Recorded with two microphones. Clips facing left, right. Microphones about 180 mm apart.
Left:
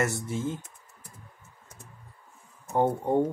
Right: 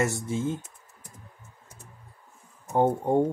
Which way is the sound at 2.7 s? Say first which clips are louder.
Right 2 dB; 15° right (ahead or behind).